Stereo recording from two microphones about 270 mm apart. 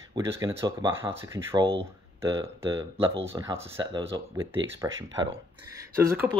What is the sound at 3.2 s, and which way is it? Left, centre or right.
Speech, centre.